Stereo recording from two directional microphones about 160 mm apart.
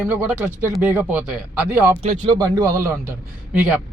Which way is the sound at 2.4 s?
20° right (ahead or behind).